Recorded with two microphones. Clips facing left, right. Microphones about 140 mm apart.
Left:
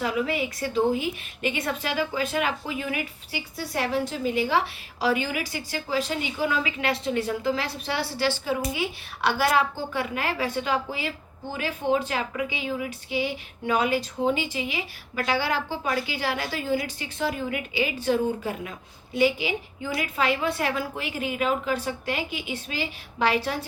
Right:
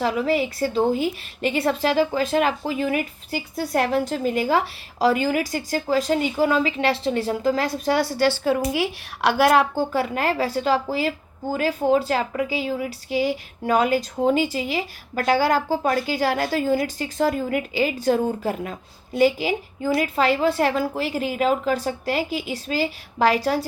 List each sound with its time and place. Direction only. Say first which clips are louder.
0.0 s a woman's voice: right 5 dB; 35° right (ahead or behind)
8.4 s a woman's voice: right 6 dB; 60° right (ahead or behind); by 23.6 s 40° right (ahead or behind)